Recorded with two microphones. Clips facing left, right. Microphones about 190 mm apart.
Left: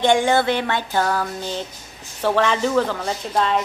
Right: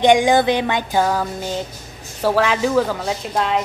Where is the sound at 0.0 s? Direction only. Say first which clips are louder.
Right 3 dB; 15° right (ahead or behind).